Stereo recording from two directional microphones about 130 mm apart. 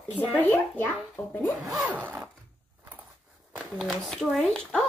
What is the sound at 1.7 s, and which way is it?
Zipper, 15° right (ahead or behind).